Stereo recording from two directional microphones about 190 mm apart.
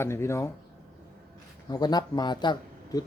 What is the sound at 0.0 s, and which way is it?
Speech, 15° left (ahead or behind).